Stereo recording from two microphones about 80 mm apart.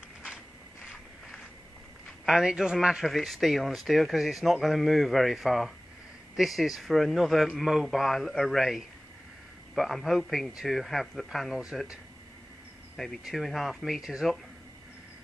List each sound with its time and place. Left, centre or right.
2.0 s a man's voice: centre
12.9 s speech: centre